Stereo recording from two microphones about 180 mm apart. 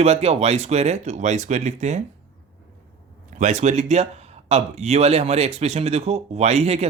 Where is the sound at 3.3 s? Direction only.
40° right (ahead or behind).